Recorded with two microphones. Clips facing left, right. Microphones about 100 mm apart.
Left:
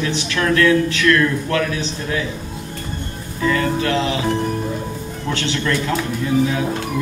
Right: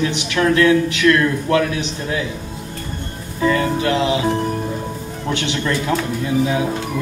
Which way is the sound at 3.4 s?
25° right (ahead or behind).